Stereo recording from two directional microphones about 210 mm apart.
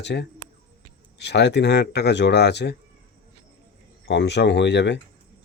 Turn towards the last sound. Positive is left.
turn(degrees=55)  # may be behind; listen again after turning